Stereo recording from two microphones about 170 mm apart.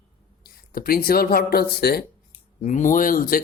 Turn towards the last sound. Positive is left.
turn(degrees=55)  # may be behind; listen again after turning